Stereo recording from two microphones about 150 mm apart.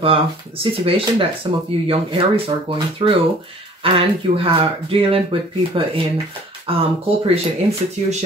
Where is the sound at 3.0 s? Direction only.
35° right (ahead or behind).